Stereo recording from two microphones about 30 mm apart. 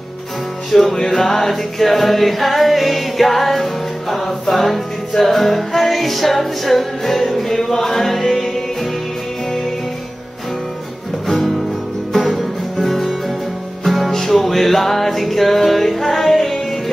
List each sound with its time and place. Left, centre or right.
0.7 s music: centre
11.2 s music: centre
14.1 s music: centre